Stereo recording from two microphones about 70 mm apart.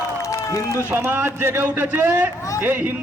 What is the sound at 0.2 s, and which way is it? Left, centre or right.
Run, left.